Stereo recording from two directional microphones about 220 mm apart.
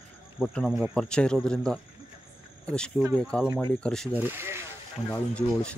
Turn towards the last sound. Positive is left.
turn(degrees=5)  # may be behind; listen again after turning